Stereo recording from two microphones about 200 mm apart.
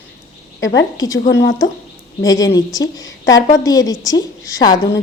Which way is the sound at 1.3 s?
65° left (ahead or behind).